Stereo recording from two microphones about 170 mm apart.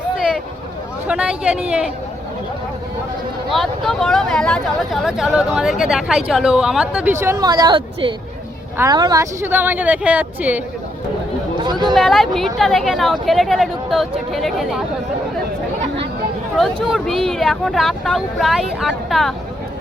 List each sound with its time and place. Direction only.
1.0 s speech: 5° right (ahead or behind)
3.5 s speech: centre (ahead or behind)
11.6 s speech: 25° right (ahead or behind)
11.9 s speech: centre (ahead or behind)
16.9 s speech: centre (ahead or behind)